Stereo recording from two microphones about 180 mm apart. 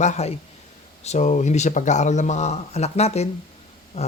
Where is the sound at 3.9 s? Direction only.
35° left (ahead or behind).